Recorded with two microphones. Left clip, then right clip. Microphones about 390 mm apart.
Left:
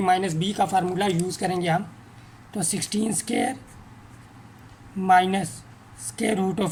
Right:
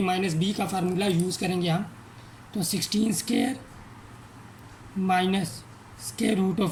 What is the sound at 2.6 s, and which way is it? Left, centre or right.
Speech, centre.